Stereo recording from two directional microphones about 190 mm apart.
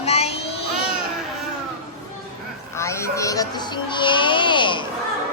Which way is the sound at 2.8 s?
15° left (ahead or behind).